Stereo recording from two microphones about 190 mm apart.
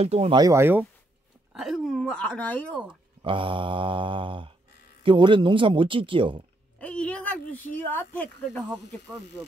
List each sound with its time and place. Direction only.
0.0 s speech: 35° right (ahead or behind)
0.4 s speech: 15° right (ahead or behind)
1.5 s speech: centre (ahead or behind)
3.2 s mantra: 25° right (ahead or behind)
6.8 s a sound: 5° left (ahead or behind)
7.9 s speech: 10° left (ahead or behind)